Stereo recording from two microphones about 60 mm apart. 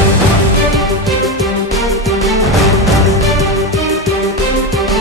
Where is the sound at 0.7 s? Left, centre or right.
Centre.